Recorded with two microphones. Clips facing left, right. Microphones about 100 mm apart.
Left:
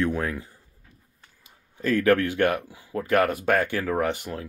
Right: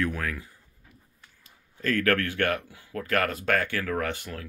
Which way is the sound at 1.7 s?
15° left (ahead or behind).